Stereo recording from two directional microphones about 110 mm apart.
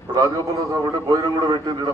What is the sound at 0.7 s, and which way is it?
A man's voice, 30° right (ahead or behind).